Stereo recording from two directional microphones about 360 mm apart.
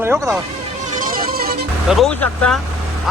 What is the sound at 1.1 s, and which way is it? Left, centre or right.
Music, right.